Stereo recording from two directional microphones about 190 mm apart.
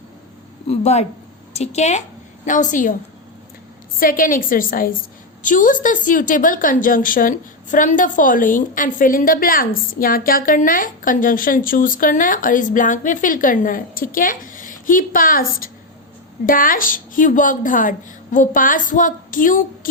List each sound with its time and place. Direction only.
0.7 s a woman's voice: 35° left (ahead or behind)
4.0 s a woman's voice: 45° left (ahead or behind)